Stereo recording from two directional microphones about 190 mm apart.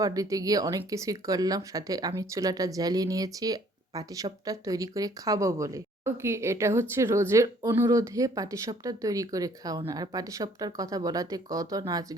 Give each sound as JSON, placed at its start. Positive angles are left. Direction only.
{"t": 0.0, "sound": "speech", "side_deg": -20}